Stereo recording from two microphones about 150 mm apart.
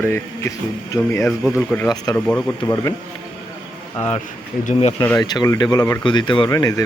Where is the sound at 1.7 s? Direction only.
15° left (ahead or behind).